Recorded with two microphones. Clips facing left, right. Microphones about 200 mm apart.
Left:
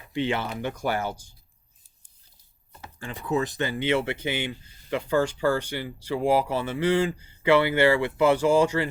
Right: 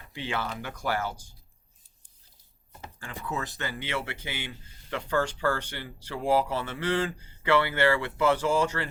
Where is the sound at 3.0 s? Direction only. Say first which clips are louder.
Left 8 dB; 20° left (ahead or behind).